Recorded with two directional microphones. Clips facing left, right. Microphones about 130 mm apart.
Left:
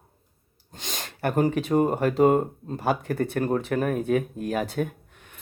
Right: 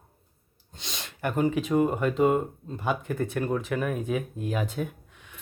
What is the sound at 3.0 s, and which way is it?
Speech, 70° left (ahead or behind).